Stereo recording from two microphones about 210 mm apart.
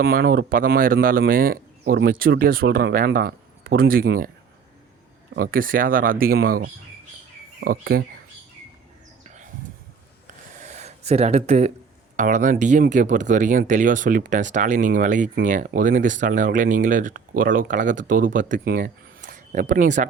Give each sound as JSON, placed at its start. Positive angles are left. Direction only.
{"t": 0.0, "sound": "speech", "side_deg": -45}
{"t": 5.3, "sound": "speech", "side_deg": -45}
{"t": 9.2, "sound": "a sound", "side_deg": -35}
{"t": 10.5, "sound": "gasp", "side_deg": -35}
{"t": 12.1, "sound": "speech", "side_deg": -35}